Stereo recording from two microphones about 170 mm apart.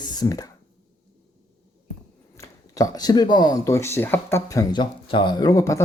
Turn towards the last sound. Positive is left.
turn(degrees=20)  # may be behind; listen again after turning